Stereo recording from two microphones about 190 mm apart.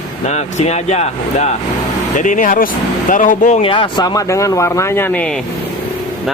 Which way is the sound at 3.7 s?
25° left (ahead or behind).